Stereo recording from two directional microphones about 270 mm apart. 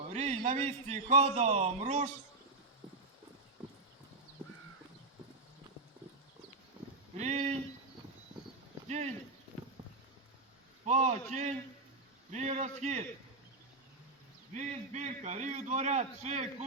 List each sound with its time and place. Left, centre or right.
0.1 s a man's voice: right
7.2 s speech: right
8.9 s speech: right
10.8 s a man's voice: right
14.5 s a man's voice: right